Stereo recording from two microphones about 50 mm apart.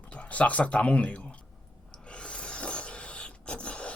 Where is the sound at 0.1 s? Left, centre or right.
Left.